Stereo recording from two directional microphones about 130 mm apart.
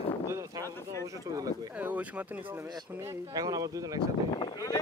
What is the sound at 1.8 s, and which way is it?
Speech, 10° right (ahead or behind).